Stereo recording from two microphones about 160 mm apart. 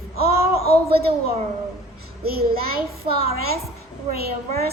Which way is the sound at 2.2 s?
75° right (ahead or behind).